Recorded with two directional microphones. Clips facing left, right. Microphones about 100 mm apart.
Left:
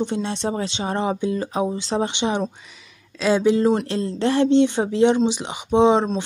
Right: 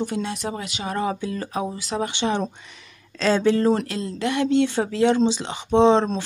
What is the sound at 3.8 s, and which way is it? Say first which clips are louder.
Speech: left 4 dB; 30° left (ahead or behind).